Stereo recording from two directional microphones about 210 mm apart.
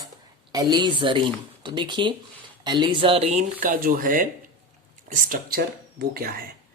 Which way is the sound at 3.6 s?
40° right (ahead or behind).